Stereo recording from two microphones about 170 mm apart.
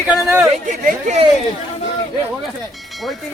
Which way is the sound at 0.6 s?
45° right (ahead or behind).